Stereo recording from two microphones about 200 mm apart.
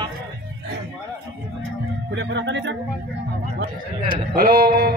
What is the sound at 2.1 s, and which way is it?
Speech, 60° right (ahead or behind).